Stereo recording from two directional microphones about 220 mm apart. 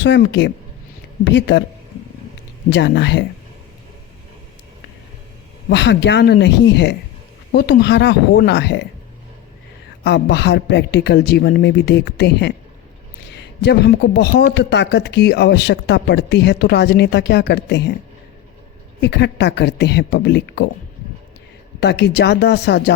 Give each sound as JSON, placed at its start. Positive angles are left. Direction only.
{"t": 0.0, "sound": "a man's voice", "side_deg": 50}
{"t": 2.6, "sound": "a man's voice", "side_deg": 50}
{"t": 5.6, "sound": "a man's voice", "side_deg": 50}
{"t": 10.0, "sound": "a man's voice", "side_deg": 50}
{"t": 18.9, "sound": "a man's voice", "side_deg": 50}
{"t": 21.8, "sound": "a man's voice", "side_deg": 50}